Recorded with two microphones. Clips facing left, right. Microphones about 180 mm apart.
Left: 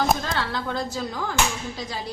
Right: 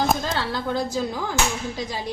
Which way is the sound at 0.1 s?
5° right (ahead or behind).